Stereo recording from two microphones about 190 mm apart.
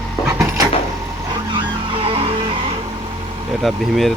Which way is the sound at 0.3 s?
15° right (ahead or behind).